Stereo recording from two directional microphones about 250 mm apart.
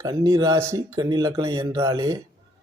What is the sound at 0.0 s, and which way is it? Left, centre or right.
Speech, centre.